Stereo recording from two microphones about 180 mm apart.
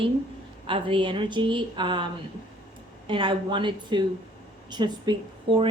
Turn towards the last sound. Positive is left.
turn(degrees=-25)  # may be behind; listen again after turning